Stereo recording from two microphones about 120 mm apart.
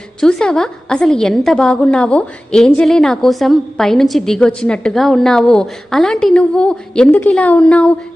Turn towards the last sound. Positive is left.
turn(degrees=10)  # may be behind; listen again after turning